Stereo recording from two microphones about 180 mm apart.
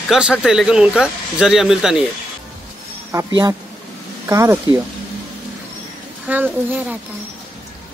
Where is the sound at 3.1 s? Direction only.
15° right (ahead or behind).